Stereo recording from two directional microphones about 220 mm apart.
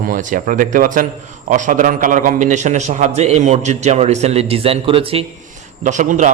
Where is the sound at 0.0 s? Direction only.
40° right (ahead or behind).